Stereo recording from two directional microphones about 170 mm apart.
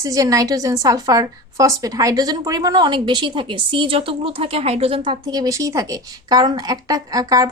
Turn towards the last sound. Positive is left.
turn(degrees=-20)  # may be behind; listen again after turning